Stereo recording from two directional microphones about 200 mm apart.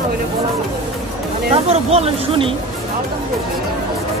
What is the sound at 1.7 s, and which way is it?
Speech, 30° right (ahead or behind).